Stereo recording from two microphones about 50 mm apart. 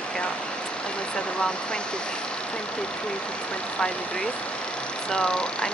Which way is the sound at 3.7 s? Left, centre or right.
Centre.